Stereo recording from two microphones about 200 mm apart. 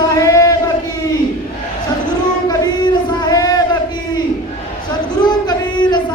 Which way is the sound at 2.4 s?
20° left (ahead or behind).